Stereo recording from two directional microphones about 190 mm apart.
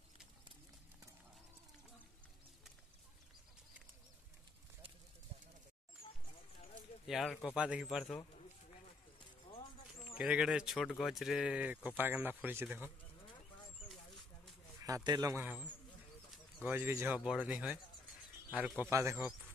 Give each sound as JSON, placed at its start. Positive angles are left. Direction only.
{"t": 7.1, "sound": "speech", "side_deg": 0}
{"t": 9.5, "sound": "music", "side_deg": 30}
{"t": 10.1, "sound": "speech", "side_deg": -5}
{"t": 14.9, "sound": "speech", "side_deg": -20}
{"t": 16.6, "sound": "speech", "side_deg": -10}